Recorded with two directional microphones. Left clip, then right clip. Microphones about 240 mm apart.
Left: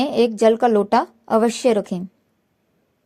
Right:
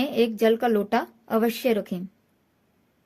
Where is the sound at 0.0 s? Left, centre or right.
Left.